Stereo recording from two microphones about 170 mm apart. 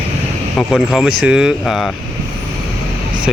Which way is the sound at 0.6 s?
Centre (ahead or behind).